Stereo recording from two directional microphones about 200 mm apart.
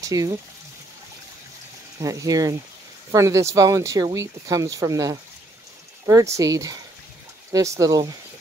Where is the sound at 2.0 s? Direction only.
15° right (ahead or behind).